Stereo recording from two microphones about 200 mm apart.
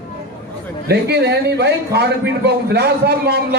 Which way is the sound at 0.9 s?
55° right (ahead or behind).